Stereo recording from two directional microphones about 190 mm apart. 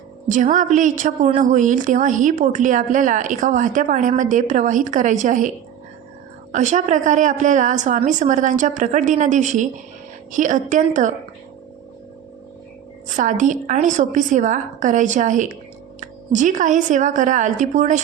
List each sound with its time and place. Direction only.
0.3 s a woman's voice: 40° right (ahead or behind)
6.5 s a woman's voice: 40° right (ahead or behind)
13.1 s a woman's voice: 40° right (ahead or behind)